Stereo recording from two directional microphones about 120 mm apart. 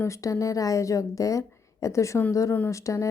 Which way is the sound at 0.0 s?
25° left (ahead or behind).